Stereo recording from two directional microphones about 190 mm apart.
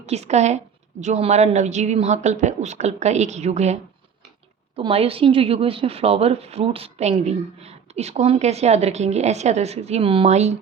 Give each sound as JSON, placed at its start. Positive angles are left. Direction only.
{"t": 0.0, "sound": "a woman's voice", "side_deg": -35}
{"t": 4.8, "sound": "a woman's voice", "side_deg": -30}